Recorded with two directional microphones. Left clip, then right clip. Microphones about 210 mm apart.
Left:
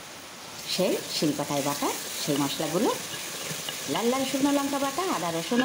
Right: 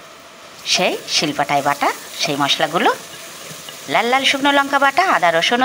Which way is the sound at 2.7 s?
15° right (ahead or behind).